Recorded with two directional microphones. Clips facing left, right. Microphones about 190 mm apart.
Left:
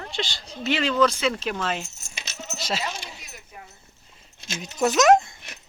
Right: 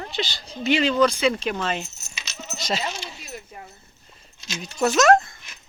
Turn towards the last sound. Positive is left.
turn(degrees=15)  # may be behind; listen again after turning